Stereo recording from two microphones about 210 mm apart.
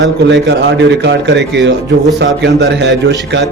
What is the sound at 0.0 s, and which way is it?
Speech, 55° right (ahead or behind).